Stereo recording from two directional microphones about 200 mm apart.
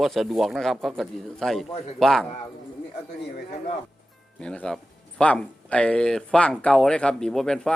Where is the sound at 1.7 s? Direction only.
30° left (ahead or behind).